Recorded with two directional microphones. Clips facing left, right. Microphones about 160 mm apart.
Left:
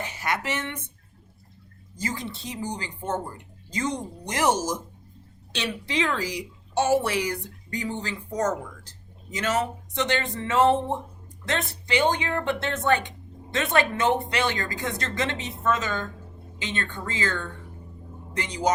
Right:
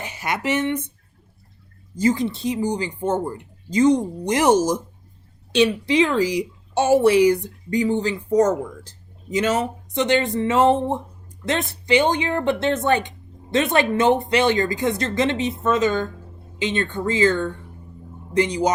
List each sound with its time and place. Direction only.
0.0 s a sound: 15° right (ahead or behind)
2.0 s speech: 20° right (ahead or behind)
4.3 s speech: 15° right (ahead or behind)
18.3 s speech: 15° right (ahead or behind)